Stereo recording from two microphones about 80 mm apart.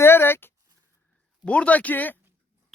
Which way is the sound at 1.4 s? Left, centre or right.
Centre.